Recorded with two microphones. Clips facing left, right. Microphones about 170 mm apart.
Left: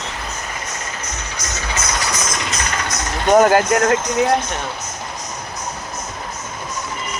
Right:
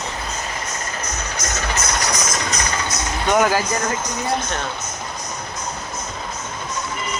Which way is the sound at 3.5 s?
65° left (ahead or behind).